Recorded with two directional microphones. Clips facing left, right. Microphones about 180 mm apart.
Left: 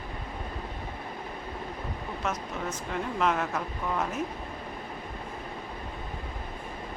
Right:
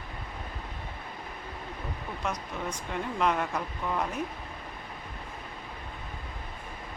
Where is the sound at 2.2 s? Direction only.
5° left (ahead or behind).